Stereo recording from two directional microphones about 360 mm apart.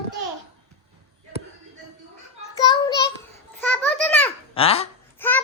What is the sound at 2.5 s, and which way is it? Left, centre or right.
Child singing, centre.